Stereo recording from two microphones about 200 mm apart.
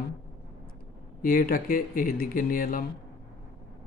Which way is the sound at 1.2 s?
45° left (ahead or behind).